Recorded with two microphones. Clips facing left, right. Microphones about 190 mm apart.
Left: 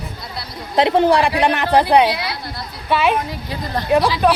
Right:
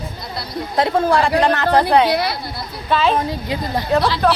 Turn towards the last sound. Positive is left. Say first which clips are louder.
# left 1 dB
turn(degrees=10)  # may be behind; listen again after turning